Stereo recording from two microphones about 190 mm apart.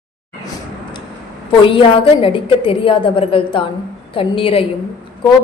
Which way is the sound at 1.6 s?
30° left (ahead or behind).